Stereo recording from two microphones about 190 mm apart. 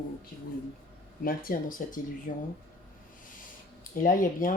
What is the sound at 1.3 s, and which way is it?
Speech, 50° left (ahead or behind).